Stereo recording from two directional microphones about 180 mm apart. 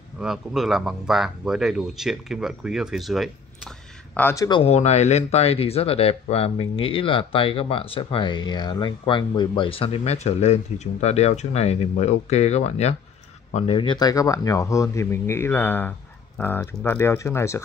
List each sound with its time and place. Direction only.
0.2 s speech: 5° right (ahead or behind)
4.1 s speech: 10° left (ahead or behind)
4.5 s speech: 30° left (ahead or behind); by 17.6 s 15° left (ahead or behind)